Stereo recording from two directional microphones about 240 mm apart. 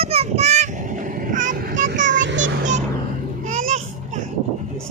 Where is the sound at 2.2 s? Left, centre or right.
Right.